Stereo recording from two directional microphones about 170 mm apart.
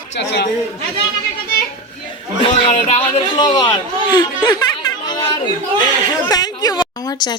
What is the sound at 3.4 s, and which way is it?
A woman's voice, 25° left (ahead or behind).